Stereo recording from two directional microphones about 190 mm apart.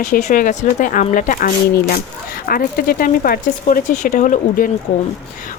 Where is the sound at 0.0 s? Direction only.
45° left (ahead or behind).